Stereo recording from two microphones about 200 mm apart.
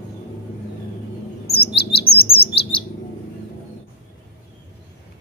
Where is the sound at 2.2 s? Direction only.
30° left (ahead or behind).